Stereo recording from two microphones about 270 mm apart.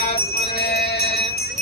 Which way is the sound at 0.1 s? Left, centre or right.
Left.